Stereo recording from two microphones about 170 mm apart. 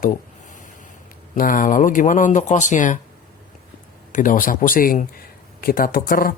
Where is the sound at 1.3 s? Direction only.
55° left (ahead or behind).